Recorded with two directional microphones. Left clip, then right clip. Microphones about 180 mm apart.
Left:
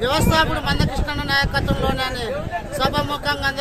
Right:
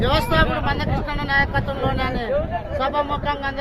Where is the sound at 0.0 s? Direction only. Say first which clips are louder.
Left 1 dB; 10° left (ahead or behind).